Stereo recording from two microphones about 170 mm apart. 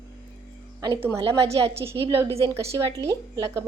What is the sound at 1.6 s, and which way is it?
Speech, 35° right (ahead or behind).